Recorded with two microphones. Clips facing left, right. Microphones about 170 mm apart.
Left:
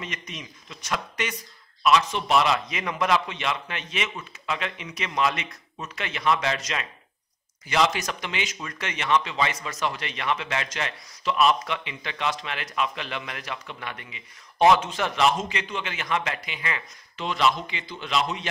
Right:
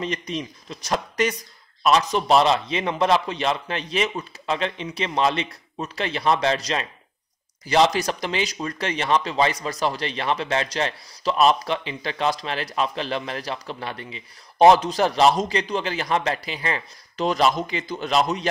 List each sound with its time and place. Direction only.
0.0 s speech: 35° right (ahead or behind)